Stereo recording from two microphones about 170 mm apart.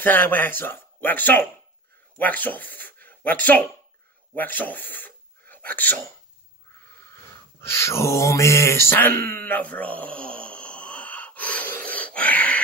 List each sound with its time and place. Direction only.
0.0 s speech: 10° left (ahead or behind)
4.4 s a sound: 10° left (ahead or behind)
5.8 s speech: 10° left (ahead or behind)
7.6 s mantra: 15° left (ahead or behind)
11.9 s dog: 10° left (ahead or behind)